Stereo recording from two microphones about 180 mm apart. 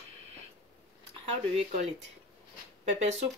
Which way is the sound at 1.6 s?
40° right (ahead or behind).